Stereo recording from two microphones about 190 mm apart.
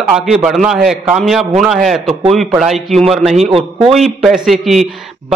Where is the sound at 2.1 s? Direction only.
35° right (ahead or behind).